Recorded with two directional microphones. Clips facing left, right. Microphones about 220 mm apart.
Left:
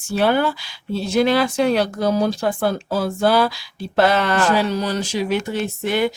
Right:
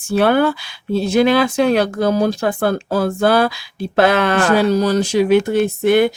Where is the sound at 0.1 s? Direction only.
55° right (ahead or behind).